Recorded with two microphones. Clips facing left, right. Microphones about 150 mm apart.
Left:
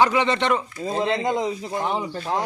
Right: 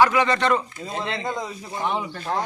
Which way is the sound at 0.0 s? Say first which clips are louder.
Right 1 dB; 25° left (ahead or behind).